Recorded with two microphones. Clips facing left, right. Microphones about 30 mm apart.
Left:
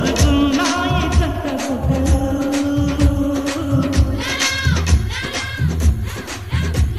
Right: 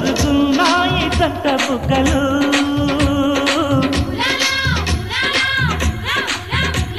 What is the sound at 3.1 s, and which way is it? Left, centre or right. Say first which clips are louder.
Music of bollywood: right 4 dB; right.